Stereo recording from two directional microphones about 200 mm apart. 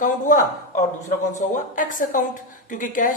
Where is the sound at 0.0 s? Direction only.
40° left (ahead or behind).